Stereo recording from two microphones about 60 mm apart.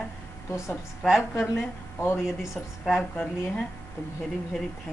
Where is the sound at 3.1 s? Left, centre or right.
Centre.